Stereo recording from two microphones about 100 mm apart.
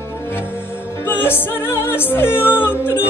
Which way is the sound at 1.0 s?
20° left (ahead or behind).